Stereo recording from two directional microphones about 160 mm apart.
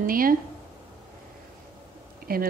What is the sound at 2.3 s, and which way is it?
Speech, 70° right (ahead or behind).